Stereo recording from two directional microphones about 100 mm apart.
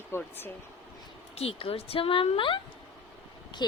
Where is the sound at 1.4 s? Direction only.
70° left (ahead or behind).